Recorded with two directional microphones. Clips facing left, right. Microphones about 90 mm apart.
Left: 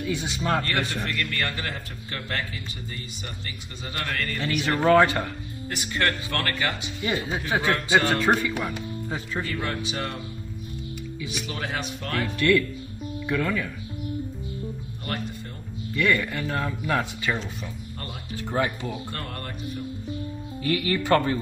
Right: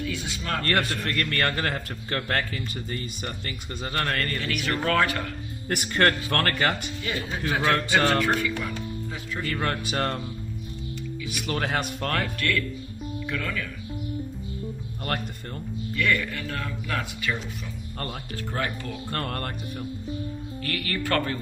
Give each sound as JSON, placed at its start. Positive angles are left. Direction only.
{"t": 0.0, "sound": "speech", "side_deg": 20}
{"t": 0.7, "sound": "a man's voice", "side_deg": -50}
{"t": 4.4, "sound": "speech", "side_deg": 20}
{"t": 5.7, "sound": "a man's voice", "side_deg": -55}
{"t": 7.0, "sound": "speech", "side_deg": 20}
{"t": 9.1, "sound": "speech", "side_deg": 30}
{"t": 9.5, "sound": "a man's voice", "side_deg": -55}
{"t": 11.4, "sound": "a man's voice", "side_deg": -50}
{"t": 12.4, "sound": "speech", "side_deg": 15}
{"t": 15.1, "sound": "a man's voice", "side_deg": -50}
{"t": 16.0, "sound": "speech", "side_deg": 20}
{"t": 18.3, "sound": "speech", "side_deg": 20}
{"t": 19.1, "sound": "a man's voice", "side_deg": -50}
{"t": 20.6, "sound": "speech", "side_deg": 15}